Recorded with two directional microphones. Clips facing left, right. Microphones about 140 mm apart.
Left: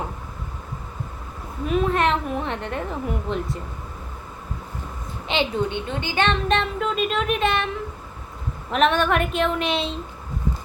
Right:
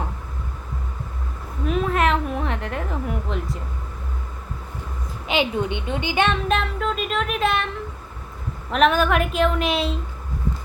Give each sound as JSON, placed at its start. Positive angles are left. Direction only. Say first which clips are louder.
{"t": 1.6, "sound": "a sound", "louder": "even", "side_deg": 0}
{"t": 5.3, "sound": "a woman's voice", "louder": "right 1 dB", "side_deg": -10}
{"t": 8.7, "sound": "a woman's voice", "louder": "right 1 dB", "side_deg": 0}